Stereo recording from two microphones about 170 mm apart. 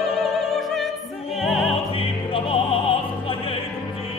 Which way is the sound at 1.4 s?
Centre (ahead or behind).